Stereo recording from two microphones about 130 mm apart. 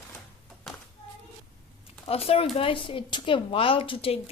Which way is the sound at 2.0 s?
50° left (ahead or behind).